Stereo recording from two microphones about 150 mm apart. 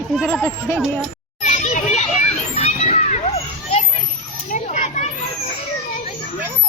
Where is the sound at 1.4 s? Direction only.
55° left (ahead or behind).